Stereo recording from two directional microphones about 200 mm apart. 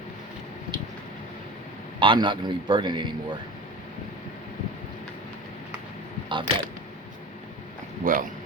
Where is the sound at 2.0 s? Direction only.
25° right (ahead or behind).